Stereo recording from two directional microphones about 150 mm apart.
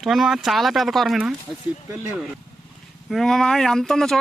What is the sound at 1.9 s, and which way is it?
Speech, 20° right (ahead or behind).